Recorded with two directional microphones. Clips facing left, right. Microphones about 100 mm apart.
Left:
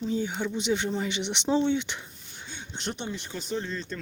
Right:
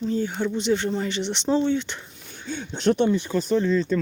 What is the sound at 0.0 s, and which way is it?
Speech, 15° left (ahead or behind).